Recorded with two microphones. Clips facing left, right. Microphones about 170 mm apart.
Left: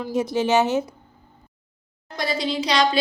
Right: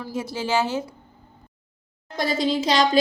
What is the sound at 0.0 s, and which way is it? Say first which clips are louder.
Speech: left 6 dB; 15° left (ahead or behind).